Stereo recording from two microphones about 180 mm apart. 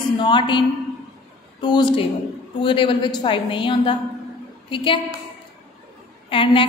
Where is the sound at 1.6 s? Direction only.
25° left (ahead or behind).